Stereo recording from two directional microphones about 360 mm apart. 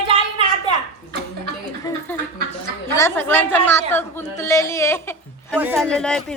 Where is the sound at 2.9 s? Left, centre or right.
Centre.